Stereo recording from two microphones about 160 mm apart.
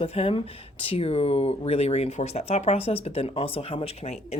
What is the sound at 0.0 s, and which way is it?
Speech, 40° left (ahead or behind).